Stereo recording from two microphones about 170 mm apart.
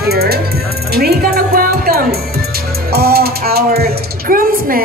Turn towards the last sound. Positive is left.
turn(degrees=-55)  # may be behind; listen again after turning